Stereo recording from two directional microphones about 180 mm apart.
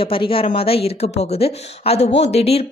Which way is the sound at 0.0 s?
30° left (ahead or behind).